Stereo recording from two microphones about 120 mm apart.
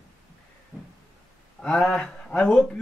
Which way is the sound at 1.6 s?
5° left (ahead or behind).